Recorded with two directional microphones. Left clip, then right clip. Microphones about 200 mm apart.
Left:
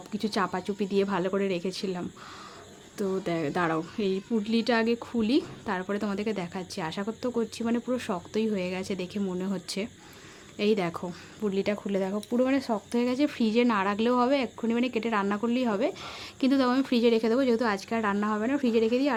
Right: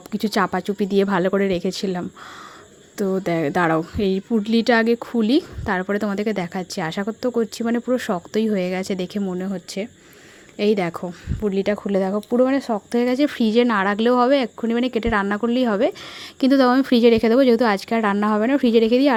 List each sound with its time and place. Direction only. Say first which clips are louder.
0.1 s speech: right 8 dB; 35° right (ahead or behind)